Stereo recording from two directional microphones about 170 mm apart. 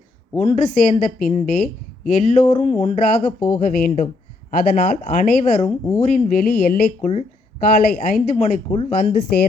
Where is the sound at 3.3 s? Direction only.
50° left (ahead or behind).